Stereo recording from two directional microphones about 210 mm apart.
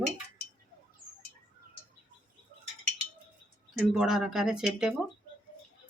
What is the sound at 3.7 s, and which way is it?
Speech, 5° right (ahead or behind).